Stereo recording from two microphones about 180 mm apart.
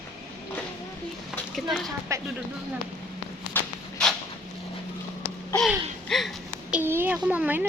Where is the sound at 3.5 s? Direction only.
10° left (ahead or behind).